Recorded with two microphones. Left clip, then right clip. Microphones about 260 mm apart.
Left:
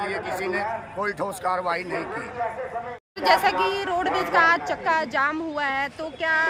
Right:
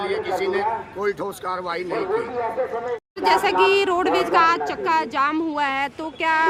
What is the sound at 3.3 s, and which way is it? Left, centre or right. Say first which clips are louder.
A man's voice: right 3 dB; centre.